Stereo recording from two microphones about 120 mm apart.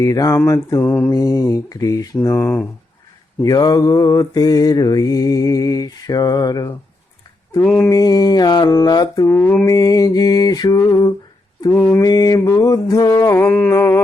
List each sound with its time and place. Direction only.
0.0 s mantra: 25° left (ahead or behind)
1.1 s mantra: 30° left (ahead or behind)
3.4 s mantra: 30° left (ahead or behind)
7.6 s mantra: 10° left (ahead or behind)
7.9 s mantra: 30° left (ahead or behind)
9.3 s mantra: 15° left (ahead or behind)
9.6 s mantra: 30° left (ahead or behind)